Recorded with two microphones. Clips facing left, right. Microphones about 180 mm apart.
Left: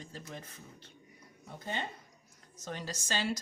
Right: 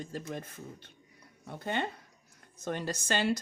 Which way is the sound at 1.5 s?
65° right (ahead or behind).